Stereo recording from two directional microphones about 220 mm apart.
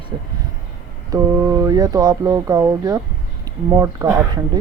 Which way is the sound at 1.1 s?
15° right (ahead or behind).